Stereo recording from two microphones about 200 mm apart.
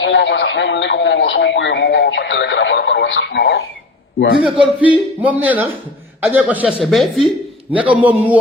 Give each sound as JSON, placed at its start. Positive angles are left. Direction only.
{"t": 0.0, "sound": "a man's voice", "side_deg": 65}
{"t": 4.4, "sound": "a man's voice", "side_deg": -25}
{"t": 4.8, "sound": "speech", "side_deg": -5}